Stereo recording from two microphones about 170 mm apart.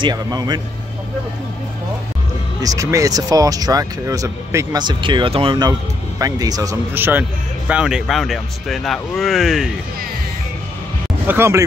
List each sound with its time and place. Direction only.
0.0 s speech: 20° right (ahead or behind)
2.6 s speech: 20° right (ahead or behind); by 9.8 s centre (ahead or behind)
11.2 s speech: 15° right (ahead or behind)